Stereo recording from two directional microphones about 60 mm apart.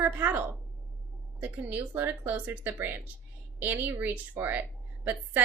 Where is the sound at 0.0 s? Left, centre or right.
Right.